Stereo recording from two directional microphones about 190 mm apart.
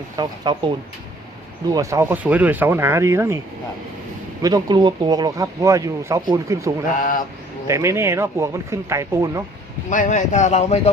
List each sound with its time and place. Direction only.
0.2 s speech: 20° right (ahead or behind)
1.7 s speech: 15° right (ahead or behind)
4.4 s speech: 20° right (ahead or behind)
7.0 s mantra: 45° left (ahead or behind)
7.7 s speech: 15° right (ahead or behind)
9.9 s speech: 40° left (ahead or behind)